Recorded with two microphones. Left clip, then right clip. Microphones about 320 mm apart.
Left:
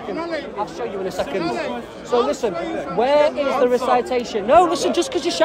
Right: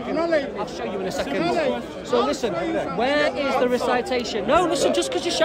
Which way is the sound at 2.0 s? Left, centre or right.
Centre.